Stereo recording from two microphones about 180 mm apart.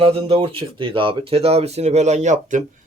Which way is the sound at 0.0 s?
30° right (ahead or behind).